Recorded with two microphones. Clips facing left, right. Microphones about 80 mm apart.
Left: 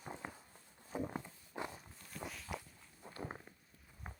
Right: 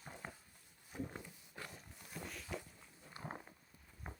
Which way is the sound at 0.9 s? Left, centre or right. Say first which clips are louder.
Left 5 dB; centre.